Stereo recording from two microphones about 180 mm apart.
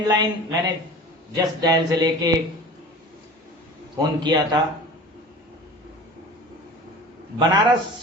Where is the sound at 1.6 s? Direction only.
20° right (ahead or behind).